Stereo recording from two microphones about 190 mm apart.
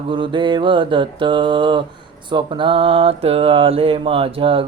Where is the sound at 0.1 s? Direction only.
25° right (ahead or behind).